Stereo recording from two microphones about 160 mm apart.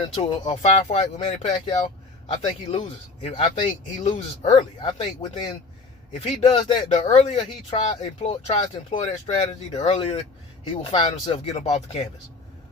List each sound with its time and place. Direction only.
0.0 s speech: 40° left (ahead or behind)
9.7 s speech: 35° left (ahead or behind)